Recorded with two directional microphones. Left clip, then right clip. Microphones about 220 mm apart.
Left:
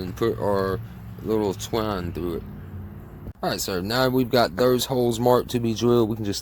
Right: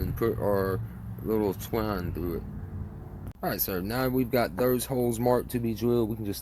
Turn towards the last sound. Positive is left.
turn(degrees=25)  # may be behind; listen again after turning